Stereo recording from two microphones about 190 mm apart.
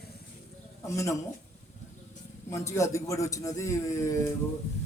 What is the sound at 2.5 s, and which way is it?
A man's voice, 15° left (ahead or behind).